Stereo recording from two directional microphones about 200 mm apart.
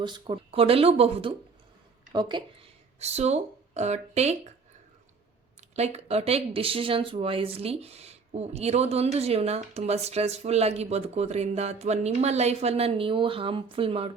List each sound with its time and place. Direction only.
0.0 s speech: 20° right (ahead or behind)
5.5 s speech: 35° right (ahead or behind)